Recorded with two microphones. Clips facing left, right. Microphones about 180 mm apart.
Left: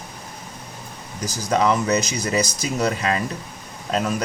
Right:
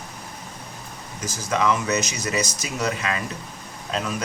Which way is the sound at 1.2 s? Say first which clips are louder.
Left 3 dB; 35° left (ahead or behind).